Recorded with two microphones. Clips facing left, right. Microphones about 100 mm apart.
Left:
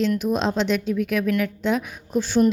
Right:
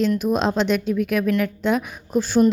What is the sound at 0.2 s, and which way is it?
A woman's voice, 50° right (ahead or behind).